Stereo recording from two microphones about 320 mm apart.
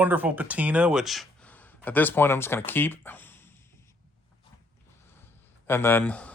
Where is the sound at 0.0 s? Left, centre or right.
Centre.